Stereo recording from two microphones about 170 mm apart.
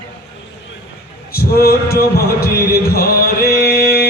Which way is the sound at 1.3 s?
65° left (ahead or behind).